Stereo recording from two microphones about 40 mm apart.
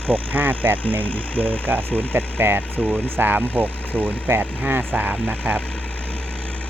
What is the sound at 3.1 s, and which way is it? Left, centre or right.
Speech, right.